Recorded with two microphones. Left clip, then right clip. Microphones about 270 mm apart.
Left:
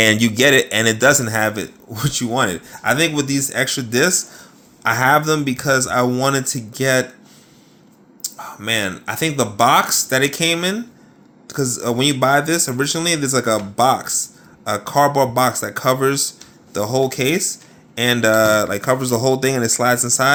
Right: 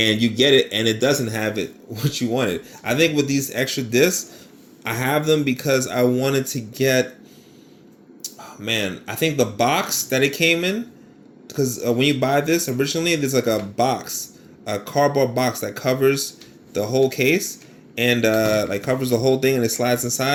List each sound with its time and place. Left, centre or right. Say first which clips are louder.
0.0 s speech: left 4 dB; left
8.2 s speech: left 4 dB; left